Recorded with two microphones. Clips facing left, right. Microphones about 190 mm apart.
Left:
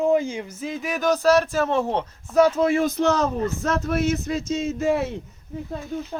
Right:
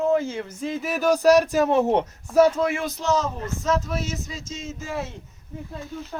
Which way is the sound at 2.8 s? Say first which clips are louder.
Left 4 dB; 60° left (ahead or behind).